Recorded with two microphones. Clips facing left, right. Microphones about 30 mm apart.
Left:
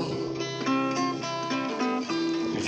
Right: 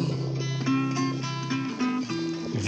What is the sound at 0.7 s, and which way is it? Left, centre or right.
Music, centre.